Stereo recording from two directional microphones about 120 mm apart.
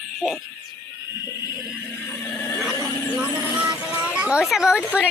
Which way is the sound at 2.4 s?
25° left (ahead or behind).